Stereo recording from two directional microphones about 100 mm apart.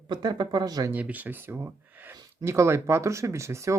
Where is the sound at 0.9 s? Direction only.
15° right (ahead or behind).